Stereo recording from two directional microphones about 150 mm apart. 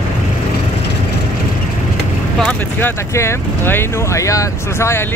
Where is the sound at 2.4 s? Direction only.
10° left (ahead or behind).